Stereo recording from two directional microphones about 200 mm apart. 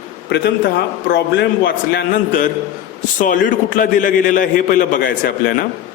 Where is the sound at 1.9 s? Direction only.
45° left (ahead or behind).